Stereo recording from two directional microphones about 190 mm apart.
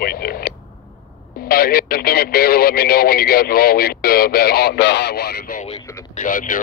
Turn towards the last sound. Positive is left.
turn(degrees=45)  # may be behind; listen again after turning